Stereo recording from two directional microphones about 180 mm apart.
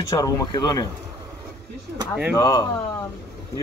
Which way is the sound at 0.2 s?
20° left (ahead or behind).